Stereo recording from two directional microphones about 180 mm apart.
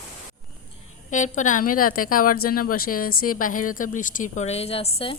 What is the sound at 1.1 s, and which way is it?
A woman's voice, 45° left (ahead or behind).